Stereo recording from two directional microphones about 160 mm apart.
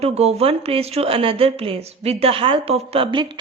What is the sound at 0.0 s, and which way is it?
A woman's voice, 40° right (ahead or behind).